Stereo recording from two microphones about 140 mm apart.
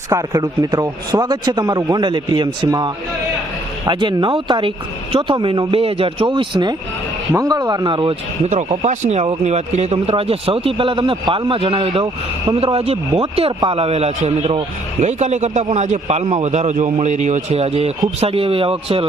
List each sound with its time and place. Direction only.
0.1 s a man's voice: 25° right (ahead or behind)
8.7 s a man's voice: 50° right (ahead or behind)